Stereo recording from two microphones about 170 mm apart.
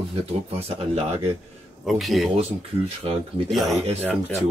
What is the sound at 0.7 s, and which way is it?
Speech, 35° right (ahead or behind).